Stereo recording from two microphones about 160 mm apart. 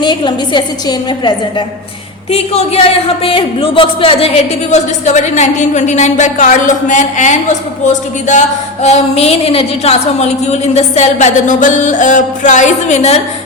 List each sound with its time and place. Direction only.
0.0 s a woman's voice: 30° left (ahead or behind)
2.3 s speech: 40° left (ahead or behind)